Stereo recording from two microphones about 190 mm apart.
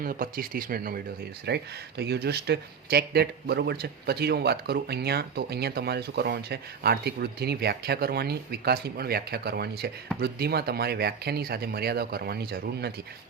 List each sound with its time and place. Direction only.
0.0 s speech: 50° right (ahead or behind)